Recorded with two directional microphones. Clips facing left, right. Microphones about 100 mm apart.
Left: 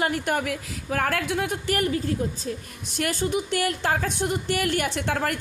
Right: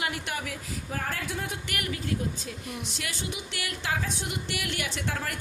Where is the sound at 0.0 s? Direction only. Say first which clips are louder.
Left 8 dB; 45° left (ahead or behind).